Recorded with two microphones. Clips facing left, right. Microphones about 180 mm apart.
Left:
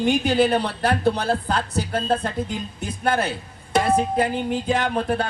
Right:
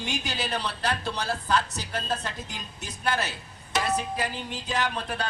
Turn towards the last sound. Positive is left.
turn(degrees=50)  # may be behind; listen again after turning